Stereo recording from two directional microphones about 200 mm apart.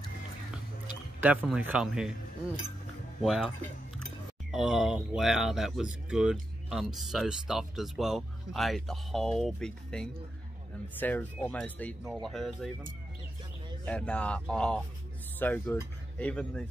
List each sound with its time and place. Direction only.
1.2 s speech: 5° right (ahead or behind)
3.2 s speech: centre (ahead or behind)
13.8 s speech: 5° left (ahead or behind)